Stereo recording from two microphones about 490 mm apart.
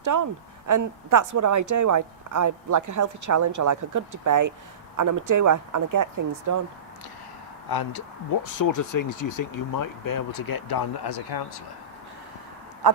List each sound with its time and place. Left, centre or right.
0.0 s speech: right
7.7 s speech: left
12.8 s a sound: right